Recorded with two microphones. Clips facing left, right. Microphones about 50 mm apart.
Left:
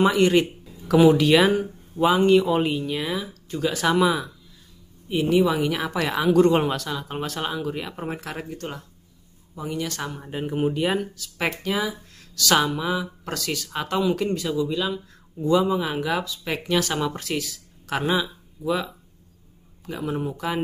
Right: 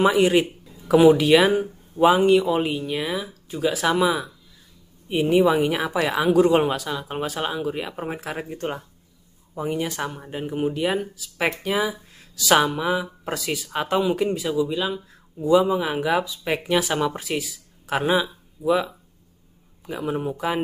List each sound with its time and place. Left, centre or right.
0.0 s speech: centre
5.0 s speech: right
5.8 s speech: centre
8.5 s speech: right
9.8 s speech: centre
10.2 s speech: centre